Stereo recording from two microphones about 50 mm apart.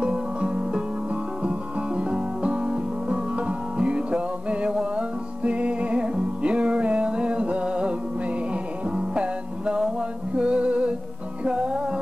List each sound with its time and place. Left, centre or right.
0.0 s music: right
8.9 s music: right